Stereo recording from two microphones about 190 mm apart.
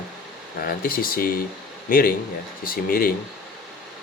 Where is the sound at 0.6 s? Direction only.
50° left (ahead or behind).